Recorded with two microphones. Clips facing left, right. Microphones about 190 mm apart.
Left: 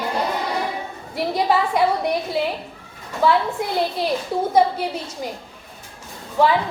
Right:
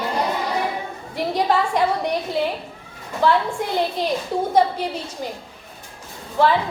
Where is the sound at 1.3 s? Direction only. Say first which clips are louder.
Left 1 dB; 10° left (ahead or behind).